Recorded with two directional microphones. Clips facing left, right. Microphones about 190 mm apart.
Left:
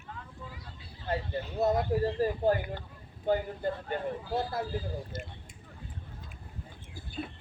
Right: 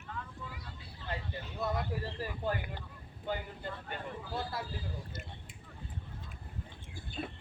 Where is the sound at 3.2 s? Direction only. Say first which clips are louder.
Left 9 dB; 40° left (ahead or behind).